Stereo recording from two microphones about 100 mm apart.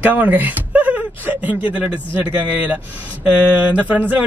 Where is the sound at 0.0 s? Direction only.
15° right (ahead or behind).